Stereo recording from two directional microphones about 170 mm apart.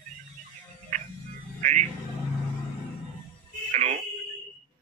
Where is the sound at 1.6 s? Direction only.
45° right (ahead or behind).